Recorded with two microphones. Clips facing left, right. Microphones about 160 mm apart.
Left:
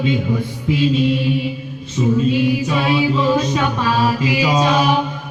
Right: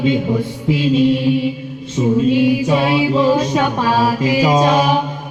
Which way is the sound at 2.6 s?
45° right (ahead or behind).